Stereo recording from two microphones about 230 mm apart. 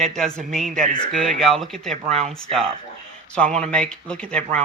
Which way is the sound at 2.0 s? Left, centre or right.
Right.